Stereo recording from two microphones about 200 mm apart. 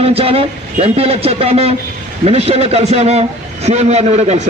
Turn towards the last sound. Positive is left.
turn(degrees=-35)  # may be behind; listen again after turning